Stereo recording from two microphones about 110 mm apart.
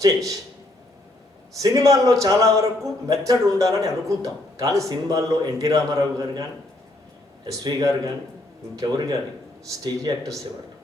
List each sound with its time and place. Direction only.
1.5 s a man's voice: 30° right (ahead or behind)
7.4 s a man's voice: 30° right (ahead or behind)